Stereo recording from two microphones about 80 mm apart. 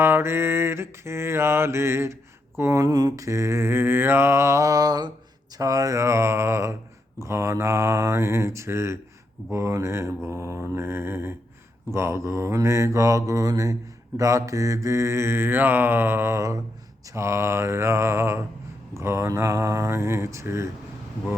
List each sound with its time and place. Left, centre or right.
0.0 s mantra: right
5.5 s mantra: right